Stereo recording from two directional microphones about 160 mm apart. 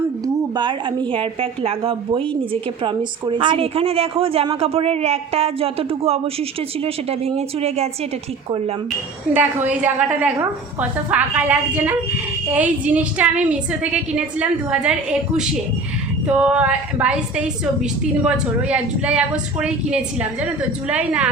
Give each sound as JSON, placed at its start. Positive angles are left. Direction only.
{"t": 0.5, "sound": "a woman's voice", "side_deg": -30}
{"t": 9.3, "sound": "a woman's voice", "side_deg": -10}
{"t": 16.2, "sound": "a woman's voice", "side_deg": -5}